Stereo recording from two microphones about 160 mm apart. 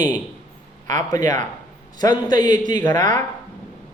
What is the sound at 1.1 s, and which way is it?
Speech, 20° left (ahead or behind).